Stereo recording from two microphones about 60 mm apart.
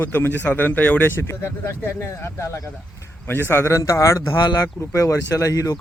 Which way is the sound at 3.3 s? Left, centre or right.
Left.